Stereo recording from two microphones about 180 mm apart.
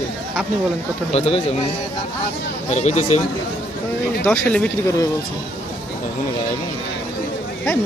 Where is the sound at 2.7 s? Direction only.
40° left (ahead or behind).